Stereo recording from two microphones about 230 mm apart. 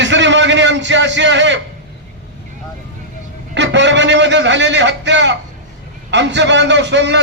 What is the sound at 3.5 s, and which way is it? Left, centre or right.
A man's voice, right.